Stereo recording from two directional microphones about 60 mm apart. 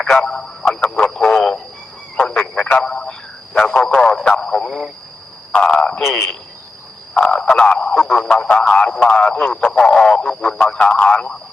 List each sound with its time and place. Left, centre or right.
0.0 s a man's voice: centre
6.0 s a man's voice: centre
7.1 s a man's voice: centre